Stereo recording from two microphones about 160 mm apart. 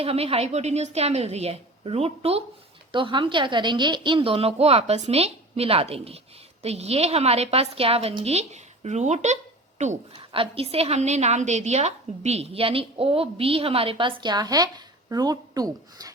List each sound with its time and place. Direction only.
0.0 s a woman's voice: 40° right (ahead or behind)
10.3 s a woman's voice: 35° right (ahead or behind)